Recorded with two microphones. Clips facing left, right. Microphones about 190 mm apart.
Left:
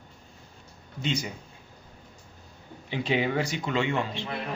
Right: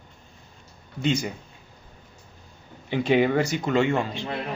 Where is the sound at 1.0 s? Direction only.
50° right (ahead or behind).